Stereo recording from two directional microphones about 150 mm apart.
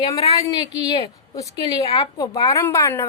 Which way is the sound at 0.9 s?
25° left (ahead or behind).